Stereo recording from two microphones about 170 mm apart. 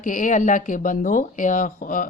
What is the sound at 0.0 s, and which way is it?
Speech, 50° left (ahead or behind).